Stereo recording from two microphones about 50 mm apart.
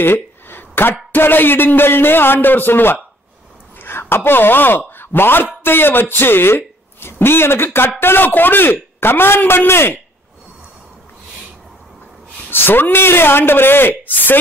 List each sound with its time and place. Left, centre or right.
0.0 s a man's voice: left
12.4 s a man's voice: left